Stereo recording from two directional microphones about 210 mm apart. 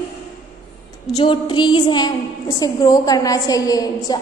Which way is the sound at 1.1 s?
25° left (ahead or behind).